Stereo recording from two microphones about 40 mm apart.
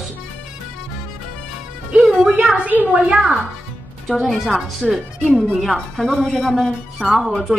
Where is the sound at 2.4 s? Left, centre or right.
Right.